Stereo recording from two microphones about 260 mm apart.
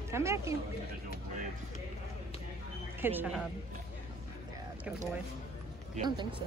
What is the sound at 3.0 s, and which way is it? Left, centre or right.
Speech, centre.